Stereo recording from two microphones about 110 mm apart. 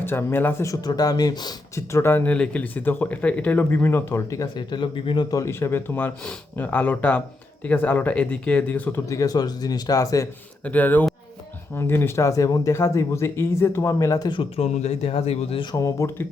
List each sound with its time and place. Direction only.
0.0 s speech: 20° left (ahead or behind)
0.7 s speech: 35° left (ahead or behind)
1.7 s speech: 25° left (ahead or behind)
4.5 s speech: 45° left (ahead or behind)
5.3 s speech: 25° left (ahead or behind)
9.0 s speech: 30° left (ahead or behind)
10.6 s speech: 15° left (ahead or behind)
14.5 s speech: 80° left; by 15.6 s 65° left (ahead or behind)
15.7 s speech: 30° left (ahead or behind)